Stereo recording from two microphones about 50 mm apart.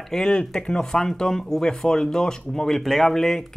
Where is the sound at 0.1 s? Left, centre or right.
Centre.